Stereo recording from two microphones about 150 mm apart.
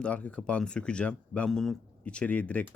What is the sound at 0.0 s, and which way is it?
Speech, 10° left (ahead or behind).